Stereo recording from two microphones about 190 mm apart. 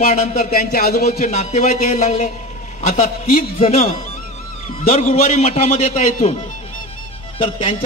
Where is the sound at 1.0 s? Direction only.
35° left (ahead or behind).